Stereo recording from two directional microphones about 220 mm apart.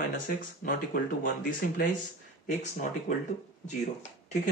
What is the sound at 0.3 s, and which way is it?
Speech, 40° left (ahead or behind).